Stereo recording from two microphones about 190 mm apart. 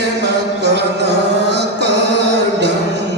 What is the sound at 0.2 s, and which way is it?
Music, 65° right (ahead or behind).